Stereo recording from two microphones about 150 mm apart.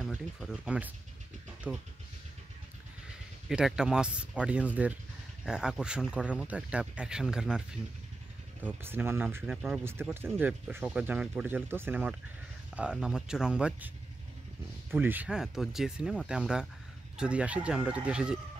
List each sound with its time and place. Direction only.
0.4 s speech: centre (ahead or behind)
3.4 s speech: 5° right (ahead or behind)
8.6 s speech: 15° right (ahead or behind)
9.5 s speech: 5° right (ahead or behind)
9.8 s speech: 15° right (ahead or behind)
15.0 s speech: 10° right (ahead or behind)